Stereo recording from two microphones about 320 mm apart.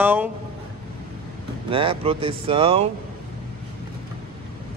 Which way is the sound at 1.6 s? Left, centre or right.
Centre.